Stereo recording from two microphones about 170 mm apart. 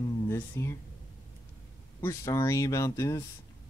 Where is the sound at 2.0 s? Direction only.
15° left (ahead or behind).